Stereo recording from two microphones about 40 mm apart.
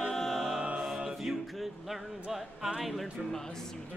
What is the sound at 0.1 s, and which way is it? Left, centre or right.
Music, centre.